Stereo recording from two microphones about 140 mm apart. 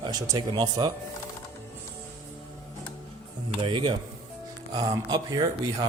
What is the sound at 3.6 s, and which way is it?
Speech, 40° right (ahead or behind).